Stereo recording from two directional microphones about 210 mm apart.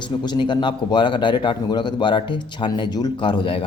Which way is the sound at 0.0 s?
20° left (ahead or behind).